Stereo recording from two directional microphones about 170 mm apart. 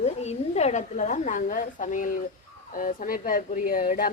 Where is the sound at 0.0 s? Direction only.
40° left (ahead or behind).